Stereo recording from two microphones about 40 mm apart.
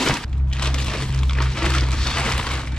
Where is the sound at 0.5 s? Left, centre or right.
Left.